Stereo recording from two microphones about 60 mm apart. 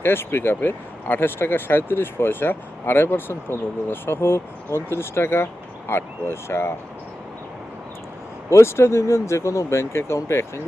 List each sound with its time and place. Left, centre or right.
0.0 s speech: left
8.4 s speech: left